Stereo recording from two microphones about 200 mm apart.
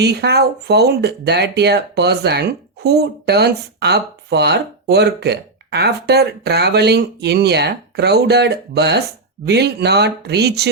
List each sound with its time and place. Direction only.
0.0 s speech: 55° right (ahead or behind)